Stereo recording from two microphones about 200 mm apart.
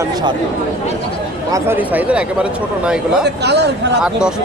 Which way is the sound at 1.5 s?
10° right (ahead or behind).